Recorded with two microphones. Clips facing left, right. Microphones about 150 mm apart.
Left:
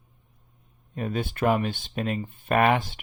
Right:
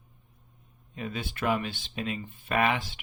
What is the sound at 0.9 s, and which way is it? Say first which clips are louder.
Speech: left 6 dB; 45° left (ahead or behind).